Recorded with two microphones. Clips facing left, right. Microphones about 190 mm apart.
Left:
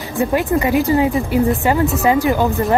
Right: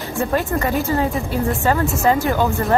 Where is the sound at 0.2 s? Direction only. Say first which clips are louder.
Left 4 dB; 15° left (ahead or behind).